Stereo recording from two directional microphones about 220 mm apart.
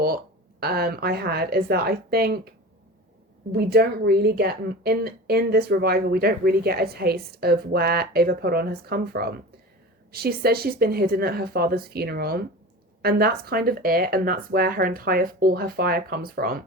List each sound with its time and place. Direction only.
0.6 s speech: 45° right (ahead or behind)
3.5 s speech: 45° right (ahead or behind)